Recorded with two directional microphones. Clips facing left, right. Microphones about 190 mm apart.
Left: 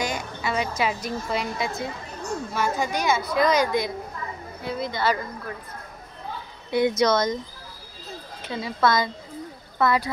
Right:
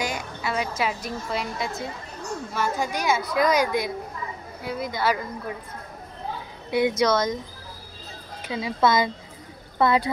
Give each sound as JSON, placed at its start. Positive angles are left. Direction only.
{"t": 0.0, "sound": "a woman's voice", "side_deg": -5}
{"t": 6.7, "sound": "a woman's voice", "side_deg": -5}
{"t": 8.5, "sound": "a woman's voice", "side_deg": -15}